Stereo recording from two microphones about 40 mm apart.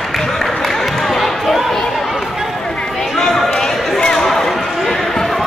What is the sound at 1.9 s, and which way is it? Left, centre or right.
Chatter, centre.